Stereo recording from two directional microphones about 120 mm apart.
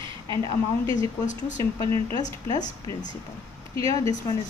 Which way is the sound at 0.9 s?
90° left.